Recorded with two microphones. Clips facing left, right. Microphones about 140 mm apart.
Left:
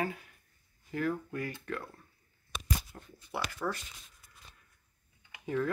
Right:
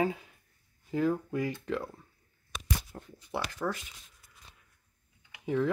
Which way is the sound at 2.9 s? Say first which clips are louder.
Right 5 dB; 30° right (ahead or behind).